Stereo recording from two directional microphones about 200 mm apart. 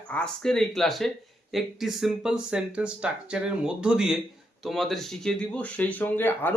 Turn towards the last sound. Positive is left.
turn(degrees=10)  # may be behind; listen again after turning